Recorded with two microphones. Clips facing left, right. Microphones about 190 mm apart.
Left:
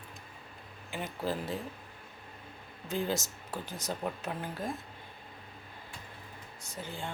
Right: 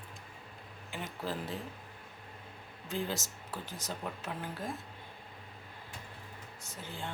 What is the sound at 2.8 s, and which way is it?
Speech, 15° left (ahead or behind).